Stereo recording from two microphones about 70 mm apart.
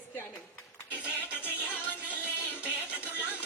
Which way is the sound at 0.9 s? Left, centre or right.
Left.